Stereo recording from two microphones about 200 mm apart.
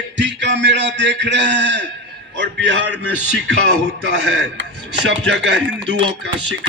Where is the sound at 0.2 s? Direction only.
65° right (ahead or behind).